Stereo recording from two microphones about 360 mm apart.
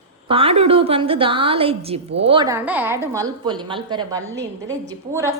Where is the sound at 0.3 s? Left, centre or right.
Centre.